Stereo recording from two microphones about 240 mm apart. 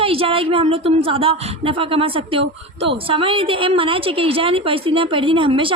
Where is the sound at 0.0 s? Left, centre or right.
Right.